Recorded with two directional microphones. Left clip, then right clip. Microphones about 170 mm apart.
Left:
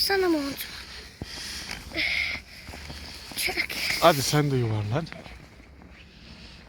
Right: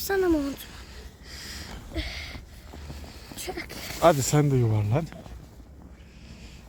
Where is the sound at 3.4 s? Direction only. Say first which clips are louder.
Left 8 dB; 25° right (ahead or behind).